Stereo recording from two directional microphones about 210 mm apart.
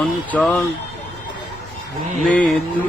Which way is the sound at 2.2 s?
5° left (ahead or behind).